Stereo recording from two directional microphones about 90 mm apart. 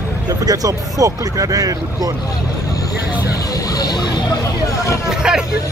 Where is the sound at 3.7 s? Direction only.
50° left (ahead or behind).